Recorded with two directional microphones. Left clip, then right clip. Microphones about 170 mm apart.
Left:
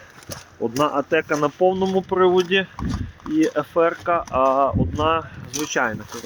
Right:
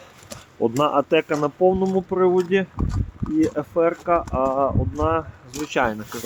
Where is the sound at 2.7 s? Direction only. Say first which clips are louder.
Left 1 dB; 65° left (ahead or behind).